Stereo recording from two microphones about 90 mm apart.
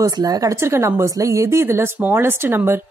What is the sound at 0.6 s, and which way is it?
Speech, 30° right (ahead or behind).